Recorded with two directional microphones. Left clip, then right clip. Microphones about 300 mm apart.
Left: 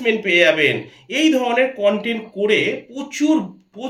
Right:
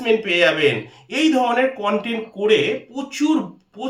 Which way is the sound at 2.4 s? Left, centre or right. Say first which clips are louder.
Right 1 dB; centre.